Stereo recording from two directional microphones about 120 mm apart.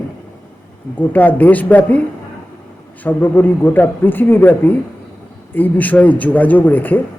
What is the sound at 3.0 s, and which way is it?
A man's voice, 15° left (ahead or behind).